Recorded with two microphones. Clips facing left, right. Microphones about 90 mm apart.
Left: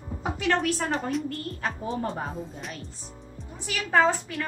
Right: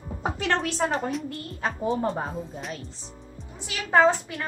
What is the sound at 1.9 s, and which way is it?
Speech, 30° right (ahead or behind).